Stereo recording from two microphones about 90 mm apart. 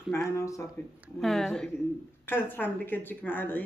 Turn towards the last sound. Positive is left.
turn(degrees=20)  # may be behind; listen again after turning